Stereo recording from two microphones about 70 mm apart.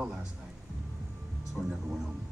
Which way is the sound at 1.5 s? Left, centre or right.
Centre.